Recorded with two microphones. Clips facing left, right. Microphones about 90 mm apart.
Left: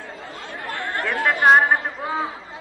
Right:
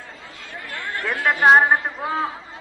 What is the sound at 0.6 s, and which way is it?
Chatter, 45° left (ahead or behind).